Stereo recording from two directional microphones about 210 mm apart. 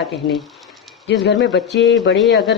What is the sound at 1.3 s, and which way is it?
Speech, centre (ahead or behind).